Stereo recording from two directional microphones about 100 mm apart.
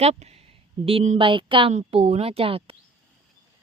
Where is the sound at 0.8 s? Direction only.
65° right (ahead or behind).